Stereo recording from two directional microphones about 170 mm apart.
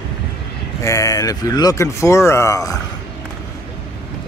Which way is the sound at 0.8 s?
20° left (ahead or behind).